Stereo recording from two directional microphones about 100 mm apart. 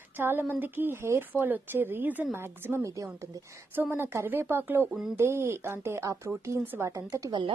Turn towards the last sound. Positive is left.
turn(degrees=-55)  # may be behind; listen again after turning